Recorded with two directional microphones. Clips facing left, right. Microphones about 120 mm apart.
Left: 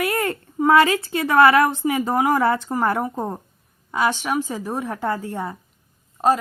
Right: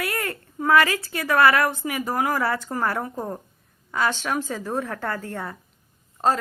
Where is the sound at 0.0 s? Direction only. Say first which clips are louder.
Left 6 dB; 20° left (ahead or behind).